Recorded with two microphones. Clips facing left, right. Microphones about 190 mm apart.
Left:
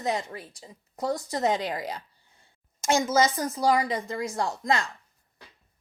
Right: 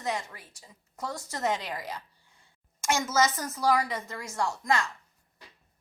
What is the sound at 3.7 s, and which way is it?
Speech, 15° left (ahead or behind).